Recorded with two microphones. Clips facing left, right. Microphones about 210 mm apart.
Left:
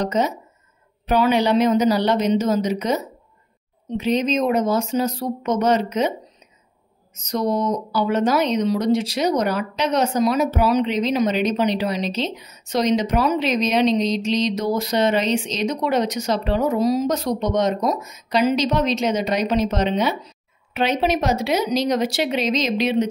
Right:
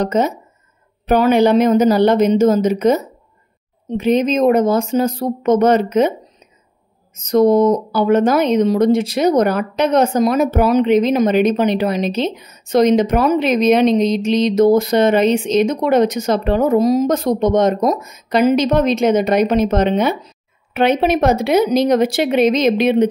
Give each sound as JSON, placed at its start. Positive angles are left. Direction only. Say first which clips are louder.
{"t": 0.0, "sound": "speech", "louder": "right 4 dB", "side_deg": -50}
{"t": 7.2, "sound": "speech", "louder": "right 10 dB", "side_deg": -50}